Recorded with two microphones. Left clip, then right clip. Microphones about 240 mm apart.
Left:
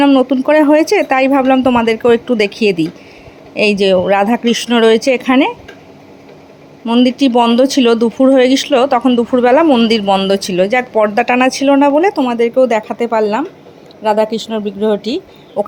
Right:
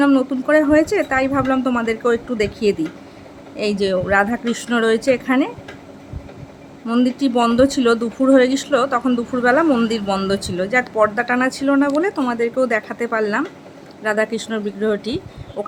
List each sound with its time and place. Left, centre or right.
0.0 s speech: centre
6.8 s speech: centre